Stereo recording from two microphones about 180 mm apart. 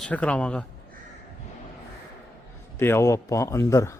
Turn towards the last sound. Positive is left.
turn(degrees=15)  # may be behind; listen again after turning